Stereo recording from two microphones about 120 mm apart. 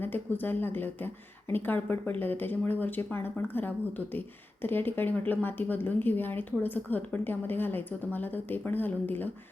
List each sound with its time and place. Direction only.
0.0 s a woman's voice: 15° left (ahead or behind)